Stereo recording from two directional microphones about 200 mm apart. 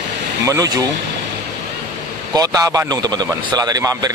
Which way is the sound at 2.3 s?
20° right (ahead or behind).